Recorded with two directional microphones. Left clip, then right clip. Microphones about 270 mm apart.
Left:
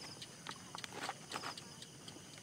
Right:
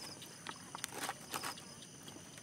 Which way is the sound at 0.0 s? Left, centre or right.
Right.